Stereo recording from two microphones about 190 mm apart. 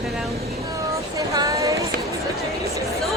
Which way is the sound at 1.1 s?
20° right (ahead or behind).